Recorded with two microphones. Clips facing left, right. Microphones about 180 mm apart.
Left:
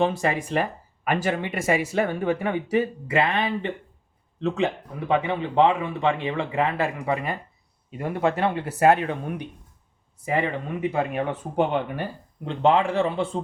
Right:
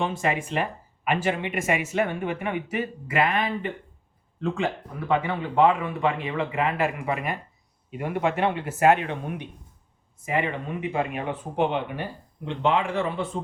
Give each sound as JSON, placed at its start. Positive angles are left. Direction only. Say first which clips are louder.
{"t": 0.0, "sound": "speech", "louder": "left 3 dB", "side_deg": 35}
{"t": 10.2, "sound": "speech", "louder": "left 2 dB", "side_deg": 35}